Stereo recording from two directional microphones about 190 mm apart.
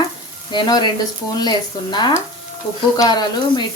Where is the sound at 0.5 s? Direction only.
25° left (ahead or behind).